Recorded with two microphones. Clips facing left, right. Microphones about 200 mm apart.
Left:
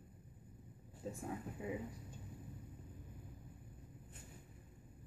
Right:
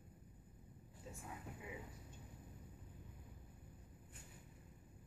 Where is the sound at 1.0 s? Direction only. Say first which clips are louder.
Left 10 dB; 35° left (ahead or behind).